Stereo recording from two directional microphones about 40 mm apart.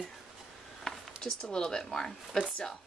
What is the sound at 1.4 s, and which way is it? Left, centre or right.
Speech, centre.